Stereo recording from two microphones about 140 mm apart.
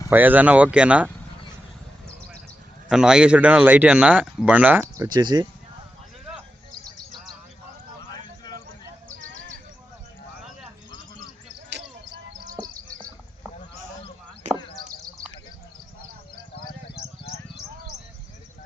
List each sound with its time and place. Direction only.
0.1 s speech: 15° right (ahead or behind)
2.9 s speech: 5° right (ahead or behind)
5.0 s speech: 30° right (ahead or behind)